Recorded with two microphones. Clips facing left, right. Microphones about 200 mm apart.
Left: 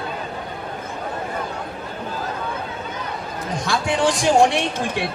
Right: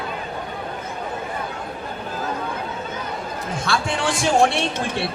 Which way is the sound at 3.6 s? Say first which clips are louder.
Left 4 dB; 15° left (ahead or behind).